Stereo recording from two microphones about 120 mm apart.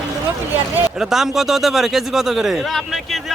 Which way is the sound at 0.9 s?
5° right (ahead or behind).